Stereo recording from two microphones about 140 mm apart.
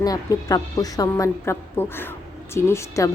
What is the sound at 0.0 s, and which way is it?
A woman's voice, 25° left (ahead or behind).